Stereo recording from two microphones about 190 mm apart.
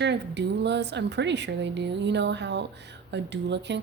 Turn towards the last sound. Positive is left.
turn(degrees=-65)  # may be behind; listen again after turning